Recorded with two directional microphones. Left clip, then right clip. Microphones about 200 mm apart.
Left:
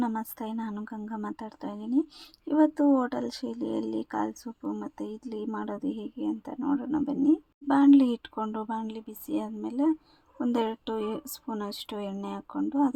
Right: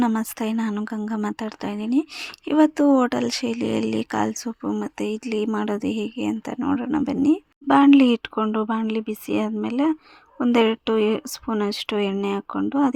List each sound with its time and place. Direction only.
0.0 s speech: 25° right (ahead or behind)